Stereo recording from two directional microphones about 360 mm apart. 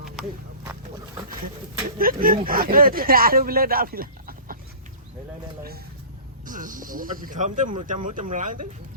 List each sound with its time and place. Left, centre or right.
0.0 s wild animals: centre
2.0 s speech: right
6.4 s speech: right